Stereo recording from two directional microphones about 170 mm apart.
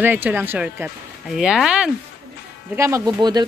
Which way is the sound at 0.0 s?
10° right (ahead or behind).